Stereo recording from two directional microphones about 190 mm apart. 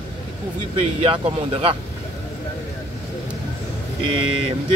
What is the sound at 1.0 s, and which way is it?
Speech, 30° right (ahead or behind).